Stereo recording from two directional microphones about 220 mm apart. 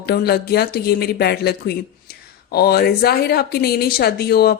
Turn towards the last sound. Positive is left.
turn(degrees=45)  # may be behind; listen again after turning